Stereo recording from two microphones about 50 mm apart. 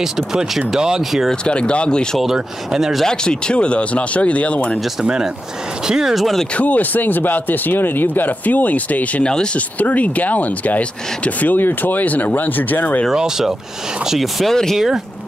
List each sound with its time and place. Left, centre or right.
0.0 s speech: centre
1.4 s speech: left
2.1 s speech: centre
3.0 s speech: centre
5.0 s speech: centre
6.1 s speech: centre
6.5 s speech: left
9.2 s speech: centre
9.8 s speech: left
13.1 s speech: centre
14.1 s speech: centre